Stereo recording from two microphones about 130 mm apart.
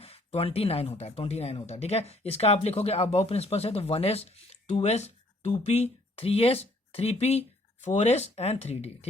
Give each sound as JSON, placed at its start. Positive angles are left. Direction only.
{"t": 0.0, "sound": "speech", "side_deg": 50}